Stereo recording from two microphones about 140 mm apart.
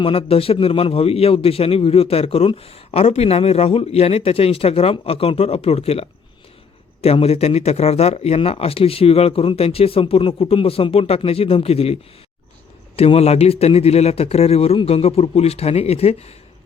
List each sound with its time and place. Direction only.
0.0 s a man's voice: 40° left (ahead or behind)
13.0 s a man's voice: 45° left (ahead or behind)